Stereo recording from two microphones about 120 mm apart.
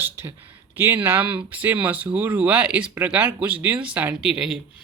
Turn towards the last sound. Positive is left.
turn(degrees=-5)  # may be behind; listen again after turning